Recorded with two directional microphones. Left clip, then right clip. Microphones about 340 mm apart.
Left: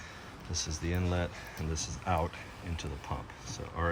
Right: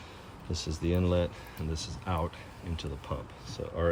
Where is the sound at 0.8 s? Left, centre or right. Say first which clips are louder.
Right 8 dB; centre.